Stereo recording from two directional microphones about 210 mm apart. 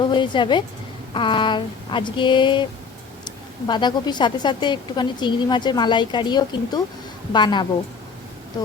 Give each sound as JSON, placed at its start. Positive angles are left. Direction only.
{"t": 0.1, "sound": "a woman's voice", "side_deg": 20}